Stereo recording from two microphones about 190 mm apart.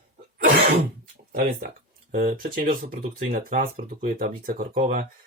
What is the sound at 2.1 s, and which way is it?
Speech, 45° right (ahead or behind).